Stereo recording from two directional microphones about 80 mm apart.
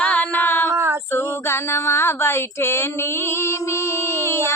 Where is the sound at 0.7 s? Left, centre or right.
Right.